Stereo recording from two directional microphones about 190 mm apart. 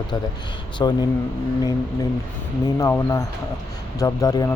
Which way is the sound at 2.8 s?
15° left (ahead or behind).